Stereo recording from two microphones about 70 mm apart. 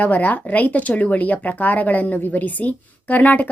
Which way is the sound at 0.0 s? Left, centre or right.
Left.